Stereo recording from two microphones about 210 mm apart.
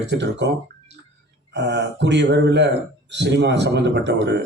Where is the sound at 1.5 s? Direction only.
55° right (ahead or behind).